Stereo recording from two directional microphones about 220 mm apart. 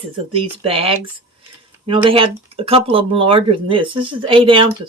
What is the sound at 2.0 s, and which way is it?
Speech, 25° right (ahead or behind).